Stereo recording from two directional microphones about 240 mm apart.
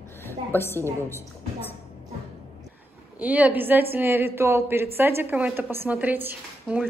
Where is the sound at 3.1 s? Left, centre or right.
Centre.